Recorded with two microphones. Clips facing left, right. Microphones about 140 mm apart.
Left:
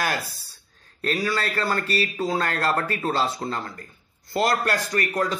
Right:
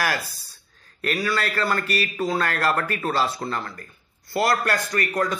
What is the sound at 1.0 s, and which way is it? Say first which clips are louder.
Speech: even; 35° left (ahead or behind).